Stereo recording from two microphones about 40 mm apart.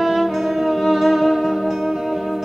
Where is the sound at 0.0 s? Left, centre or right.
Centre.